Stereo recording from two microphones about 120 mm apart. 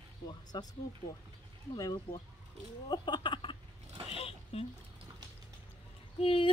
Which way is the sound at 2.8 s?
40° left (ahead or behind).